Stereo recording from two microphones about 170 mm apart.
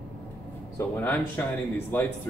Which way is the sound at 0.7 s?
15° left (ahead or behind).